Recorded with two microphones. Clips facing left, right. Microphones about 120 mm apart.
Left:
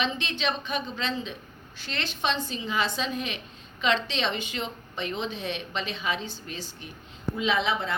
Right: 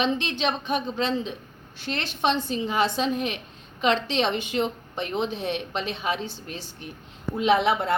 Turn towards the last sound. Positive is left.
turn(degrees=-60)  # may be behind; listen again after turning